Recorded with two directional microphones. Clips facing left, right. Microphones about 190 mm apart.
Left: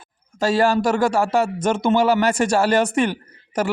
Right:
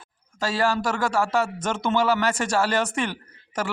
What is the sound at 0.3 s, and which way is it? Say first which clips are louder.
A man's voice: left 6 dB; 15° left (ahead or behind).